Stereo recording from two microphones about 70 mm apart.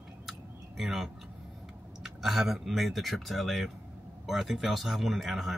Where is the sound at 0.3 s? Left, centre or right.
Centre.